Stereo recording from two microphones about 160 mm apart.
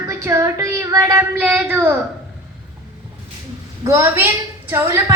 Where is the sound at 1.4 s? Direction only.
5° right (ahead or behind).